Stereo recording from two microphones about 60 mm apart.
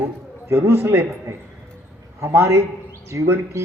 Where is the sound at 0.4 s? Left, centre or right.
Right.